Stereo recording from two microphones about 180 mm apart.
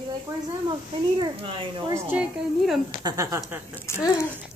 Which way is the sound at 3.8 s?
15° left (ahead or behind).